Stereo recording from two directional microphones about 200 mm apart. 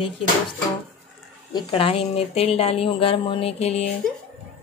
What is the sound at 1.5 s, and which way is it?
Speech, 25° left (ahead or behind).